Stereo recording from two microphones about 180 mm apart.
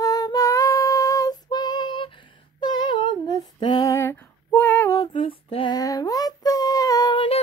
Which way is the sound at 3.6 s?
25° left (ahead or behind).